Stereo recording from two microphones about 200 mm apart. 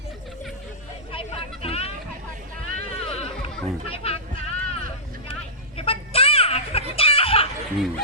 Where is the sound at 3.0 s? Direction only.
30° left (ahead or behind).